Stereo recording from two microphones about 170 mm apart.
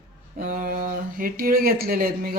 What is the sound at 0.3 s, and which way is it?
Speech, 55° right (ahead or behind).